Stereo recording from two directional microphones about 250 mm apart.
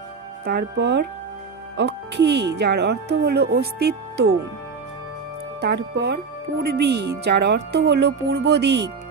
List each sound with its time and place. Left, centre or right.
0.5 s speech: right
5.6 s speech: right